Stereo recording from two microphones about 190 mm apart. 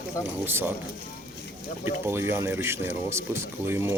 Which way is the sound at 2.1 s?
10° right (ahead or behind).